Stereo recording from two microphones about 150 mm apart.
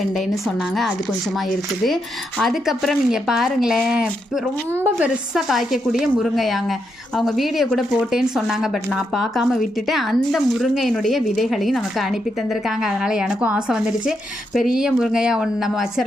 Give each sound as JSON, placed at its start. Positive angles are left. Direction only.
{"t": 2.4, "sound": "speech", "side_deg": 0}